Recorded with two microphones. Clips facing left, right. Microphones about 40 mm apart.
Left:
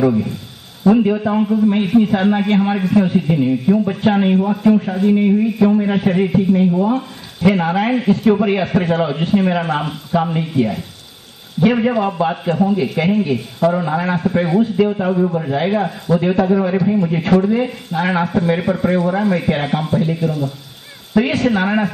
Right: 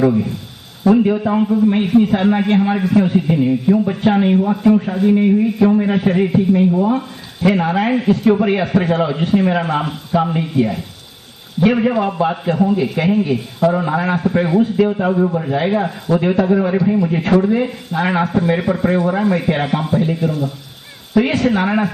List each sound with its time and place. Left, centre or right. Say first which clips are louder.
0.0 s a man's voice: right 1 dB; centre
8.3 s a man's voice: right 1 dB; centre
21.5 s a man's voice: even; centre